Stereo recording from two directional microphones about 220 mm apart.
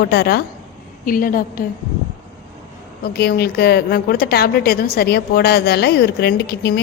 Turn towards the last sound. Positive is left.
turn(degrees=45)  # may be behind; listen again after turning